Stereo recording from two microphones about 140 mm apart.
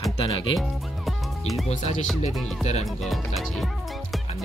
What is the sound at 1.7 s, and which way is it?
Speech, 55° left (ahead or behind).